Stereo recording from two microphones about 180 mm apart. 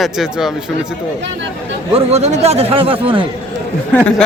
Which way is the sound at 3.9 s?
5° left (ahead or behind).